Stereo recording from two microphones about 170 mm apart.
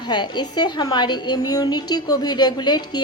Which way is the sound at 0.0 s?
25° left (ahead or behind).